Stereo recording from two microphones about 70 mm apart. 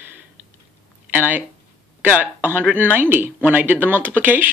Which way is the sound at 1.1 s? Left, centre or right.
Right.